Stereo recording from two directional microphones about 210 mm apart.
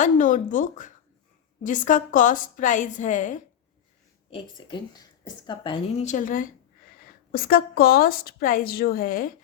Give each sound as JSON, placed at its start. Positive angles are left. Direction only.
{"t": 0.0, "sound": "a woman's voice", "side_deg": 40}
{"t": 4.3, "sound": "a woman's voice", "side_deg": 25}